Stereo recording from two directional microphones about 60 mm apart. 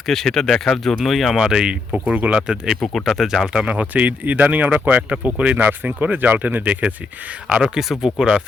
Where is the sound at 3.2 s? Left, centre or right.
Centre.